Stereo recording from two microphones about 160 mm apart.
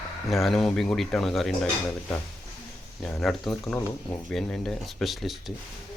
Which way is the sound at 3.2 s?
Centre (ahead or behind).